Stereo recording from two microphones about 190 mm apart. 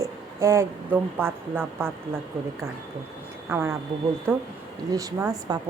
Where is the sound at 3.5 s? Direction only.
15° right (ahead or behind).